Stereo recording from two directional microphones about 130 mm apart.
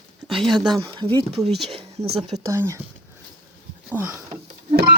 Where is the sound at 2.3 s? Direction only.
25° right (ahead or behind).